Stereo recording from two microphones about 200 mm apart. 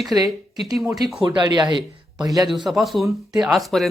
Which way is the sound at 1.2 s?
20° right (ahead or behind).